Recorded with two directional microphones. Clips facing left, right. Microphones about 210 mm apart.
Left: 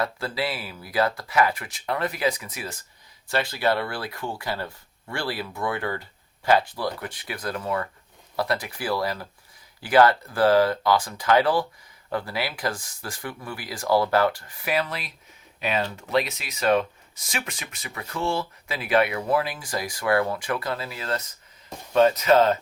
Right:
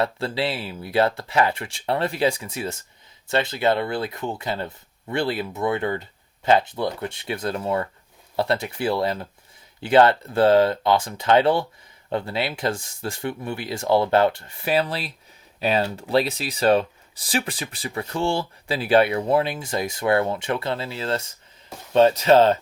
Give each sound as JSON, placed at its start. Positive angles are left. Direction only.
{"t": 0.0, "sound": "speech", "side_deg": -25}